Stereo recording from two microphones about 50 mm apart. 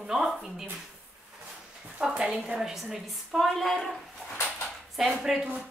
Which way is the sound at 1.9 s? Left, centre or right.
Centre.